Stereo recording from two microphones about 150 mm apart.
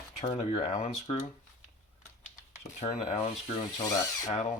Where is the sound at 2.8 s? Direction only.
50° left (ahead or behind).